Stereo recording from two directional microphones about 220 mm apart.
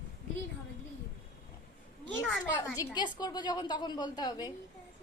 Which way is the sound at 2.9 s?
20° left (ahead or behind).